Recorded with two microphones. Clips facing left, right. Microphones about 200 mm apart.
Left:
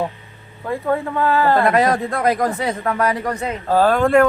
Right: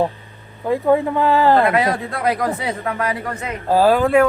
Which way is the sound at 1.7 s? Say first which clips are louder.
Left 2 dB; 45° left (ahead or behind).